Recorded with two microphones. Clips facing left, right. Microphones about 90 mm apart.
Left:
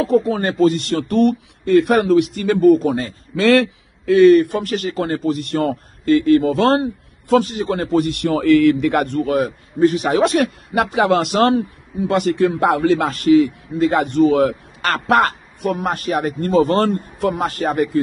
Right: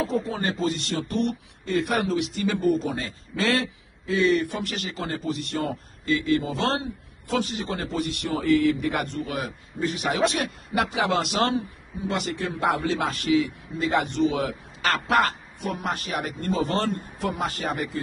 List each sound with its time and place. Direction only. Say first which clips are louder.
0.0 s speech: left 9 dB; 75° left (ahead or behind); by 3.2 s 50° left (ahead or behind)
3.3 s speech: left 11 dB; 70° left (ahead or behind); by 17.9 s 50° left (ahead or behind)